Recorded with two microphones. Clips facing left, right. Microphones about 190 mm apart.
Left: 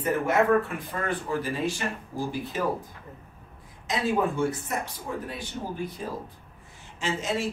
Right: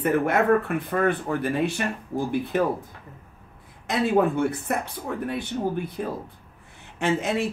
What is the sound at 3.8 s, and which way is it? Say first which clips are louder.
Speech: right 5 dB; 60° right (ahead or behind).